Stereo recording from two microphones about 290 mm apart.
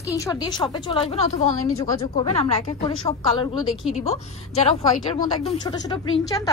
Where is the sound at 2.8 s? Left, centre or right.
Centre.